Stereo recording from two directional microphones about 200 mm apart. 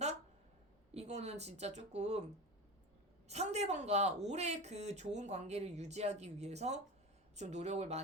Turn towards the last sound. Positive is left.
turn(degrees=-35)  # may be behind; listen again after turning